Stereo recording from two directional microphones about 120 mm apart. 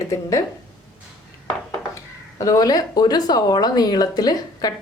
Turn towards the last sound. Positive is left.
turn(degrees=35)  # may be behind; listen again after turning